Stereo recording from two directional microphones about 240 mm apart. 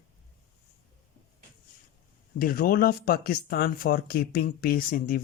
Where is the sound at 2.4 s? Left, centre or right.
Left.